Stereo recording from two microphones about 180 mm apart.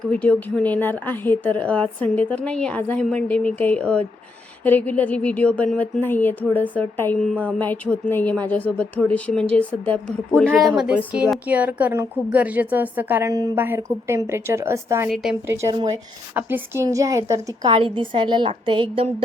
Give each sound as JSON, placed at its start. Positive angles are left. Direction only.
{"t": 0.1, "sound": "speech", "side_deg": 10}
{"t": 10.6, "sound": "a woman's voice", "side_deg": -5}
{"t": 15.1, "sound": "speech", "side_deg": 0}
{"t": 15.4, "sound": "a woman's voice", "side_deg": -15}
{"t": 16.3, "sound": "a woman's voice", "side_deg": -10}
{"t": 17.7, "sound": "a woman's voice", "side_deg": -30}